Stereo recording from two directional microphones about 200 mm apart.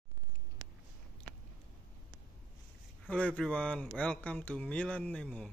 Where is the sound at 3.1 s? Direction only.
5° left (ahead or behind).